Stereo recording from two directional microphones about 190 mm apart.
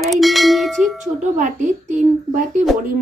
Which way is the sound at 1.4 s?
40° right (ahead or behind).